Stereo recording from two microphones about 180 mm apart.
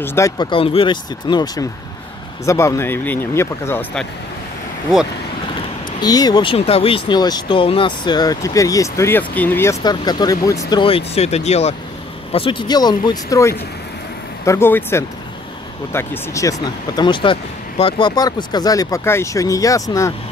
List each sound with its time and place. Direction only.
0.0 s speech: 15° left (ahead or behind)
0.5 s speech: 30° left (ahead or behind); by 4.0 s 15° left (ahead or behind)
5.9 s speech: 20° left (ahead or behind)